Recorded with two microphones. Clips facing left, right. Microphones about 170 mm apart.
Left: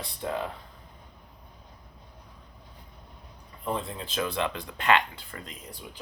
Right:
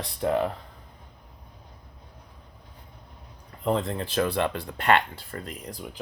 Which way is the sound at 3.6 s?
80° right.